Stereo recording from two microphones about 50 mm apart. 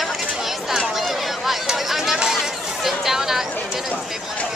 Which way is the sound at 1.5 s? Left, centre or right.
Centre.